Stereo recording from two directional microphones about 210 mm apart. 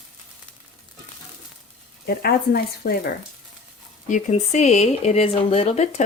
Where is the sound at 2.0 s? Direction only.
50° left (ahead or behind).